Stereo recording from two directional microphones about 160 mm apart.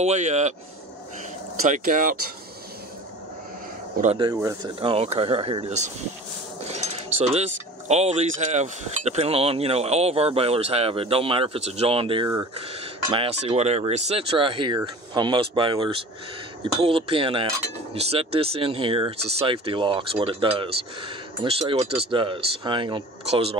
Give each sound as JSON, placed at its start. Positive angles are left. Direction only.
{"t": 0.0, "sound": "speech", "side_deg": -45}
{"t": 1.7, "sound": "speech", "side_deg": -55}
{"t": 4.2, "sound": "speech", "side_deg": -20}
{"t": 4.7, "sound": "speech", "side_deg": -35}